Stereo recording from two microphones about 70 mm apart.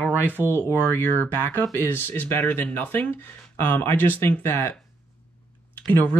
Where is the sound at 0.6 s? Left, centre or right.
Left.